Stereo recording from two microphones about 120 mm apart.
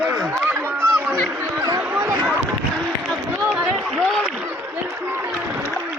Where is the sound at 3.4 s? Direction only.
5° right (ahead or behind).